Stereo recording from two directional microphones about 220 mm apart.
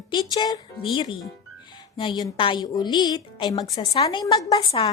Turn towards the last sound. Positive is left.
turn(degrees=20)  # may be behind; listen again after turning